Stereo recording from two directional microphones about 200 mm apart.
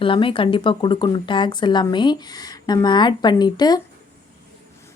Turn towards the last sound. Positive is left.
turn(degrees=20)  # may be behind; listen again after turning